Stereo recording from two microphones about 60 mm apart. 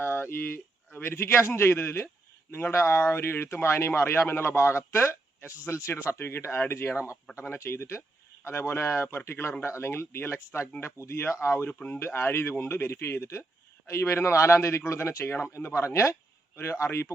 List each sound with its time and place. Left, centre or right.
0.0 s a man's voice: left
11.7 s speech: left
11.9 s a man's voice: left